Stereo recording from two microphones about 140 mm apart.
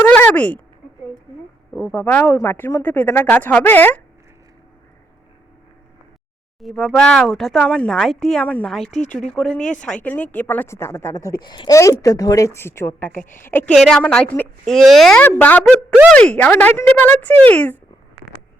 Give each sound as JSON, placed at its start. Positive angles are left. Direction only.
{"t": 0.0, "sound": "speech", "side_deg": 10}
{"t": 1.9, "sound": "speech", "side_deg": 15}
{"t": 6.6, "sound": "speech", "side_deg": 0}
{"t": 8.9, "sound": "speech", "side_deg": 55}
{"t": 9.1, "sound": "speech", "side_deg": 5}
{"t": 9.6, "sound": "speech", "side_deg": 60}
{"t": 9.8, "sound": "speech", "side_deg": 10}
{"t": 11.3, "sound": "a woman's voice", "side_deg": 30}
{"t": 13.7, "sound": "speech", "side_deg": 5}